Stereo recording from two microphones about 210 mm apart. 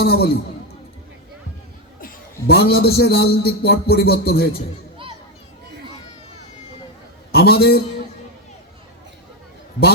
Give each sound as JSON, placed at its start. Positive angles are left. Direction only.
{"t": 0.0, "sound": "a man's voice", "side_deg": 50}
{"t": 2.0, "sound": "a man's voice", "side_deg": 45}
{"t": 7.3, "sound": "a man's voice", "side_deg": 50}